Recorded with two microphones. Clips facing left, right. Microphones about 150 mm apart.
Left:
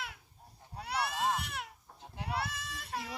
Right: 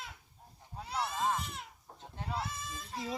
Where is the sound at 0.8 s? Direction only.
70° left (ahead or behind).